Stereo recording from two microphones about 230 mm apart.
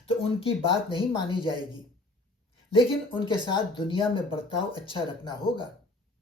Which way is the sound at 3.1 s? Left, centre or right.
Centre.